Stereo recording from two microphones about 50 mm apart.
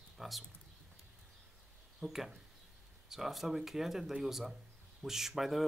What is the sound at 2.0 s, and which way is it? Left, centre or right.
Speech, centre.